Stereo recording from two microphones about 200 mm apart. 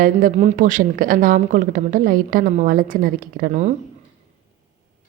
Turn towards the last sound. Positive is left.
turn(degrees=-35)  # may be behind; listen again after turning